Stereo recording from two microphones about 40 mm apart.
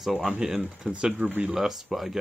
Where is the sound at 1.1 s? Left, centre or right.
Right.